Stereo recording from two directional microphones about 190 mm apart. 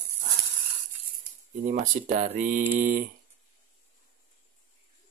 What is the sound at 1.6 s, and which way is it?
Speech, 40° right (ahead or behind).